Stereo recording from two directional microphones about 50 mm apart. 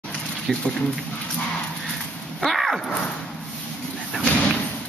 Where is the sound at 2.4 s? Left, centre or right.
Centre.